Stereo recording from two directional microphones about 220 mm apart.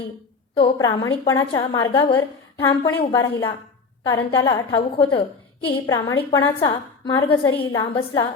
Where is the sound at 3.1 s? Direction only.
20° left (ahead or behind).